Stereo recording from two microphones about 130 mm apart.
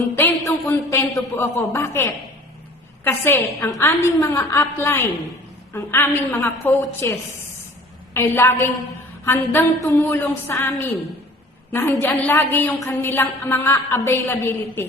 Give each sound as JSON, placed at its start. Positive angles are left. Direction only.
{"t": 0.2, "sound": "a woman's voice", "side_deg": 25}